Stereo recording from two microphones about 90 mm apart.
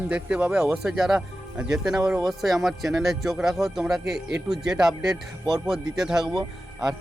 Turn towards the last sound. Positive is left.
turn(degrees=-50)  # may be behind; listen again after turning